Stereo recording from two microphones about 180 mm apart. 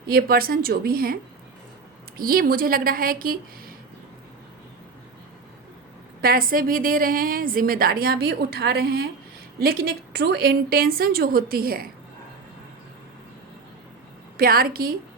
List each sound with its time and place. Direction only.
0.1 s a woman's voice: 55° right (ahead or behind)
6.2 s a woman's voice: 55° right (ahead or behind)
14.3 s a woman's voice: 55° right (ahead or behind)